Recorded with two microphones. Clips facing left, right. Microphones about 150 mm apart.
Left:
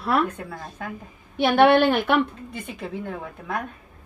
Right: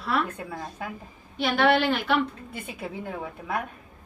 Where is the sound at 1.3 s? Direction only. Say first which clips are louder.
Left 6 dB; 60° left (ahead or behind).